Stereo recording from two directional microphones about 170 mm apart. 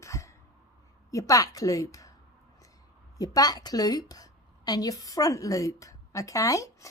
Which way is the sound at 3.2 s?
20° left (ahead or behind).